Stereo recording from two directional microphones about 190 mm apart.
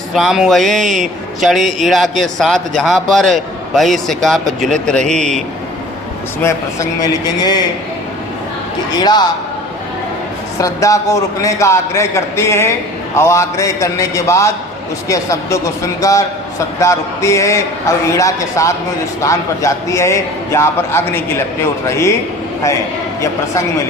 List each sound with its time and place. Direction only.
0.1 s a man's voice: centre (ahead or behind)
6.4 s a man's voice: 15° left (ahead or behind)
9.0 s a man's voice: 20° left (ahead or behind)
10.6 s a man's voice: 15° left (ahead or behind)